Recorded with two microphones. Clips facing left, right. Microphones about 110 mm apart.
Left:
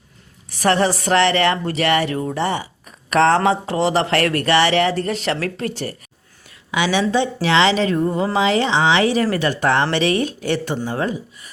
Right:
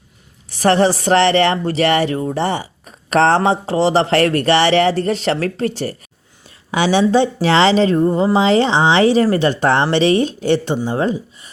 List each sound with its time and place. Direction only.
0.6 s a woman's voice: 30° right (ahead or behind)